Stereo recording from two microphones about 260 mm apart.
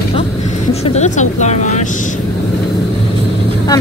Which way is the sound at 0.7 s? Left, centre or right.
Left.